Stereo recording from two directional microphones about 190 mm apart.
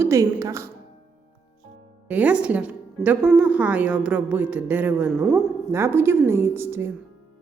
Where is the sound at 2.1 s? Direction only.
10° right (ahead or behind).